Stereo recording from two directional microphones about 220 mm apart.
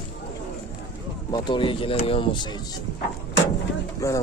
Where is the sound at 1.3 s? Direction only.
20° left (ahead or behind).